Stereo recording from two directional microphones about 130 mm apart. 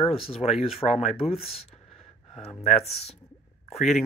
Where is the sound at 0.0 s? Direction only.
50° left (ahead or behind).